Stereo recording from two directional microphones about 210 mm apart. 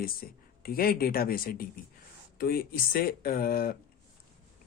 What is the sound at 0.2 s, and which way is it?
Speech, 40° left (ahead or behind).